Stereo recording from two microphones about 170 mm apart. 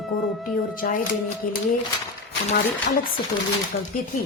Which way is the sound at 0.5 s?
55° left (ahead or behind).